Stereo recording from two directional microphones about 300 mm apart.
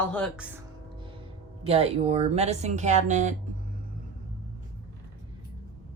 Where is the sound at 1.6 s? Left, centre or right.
Centre.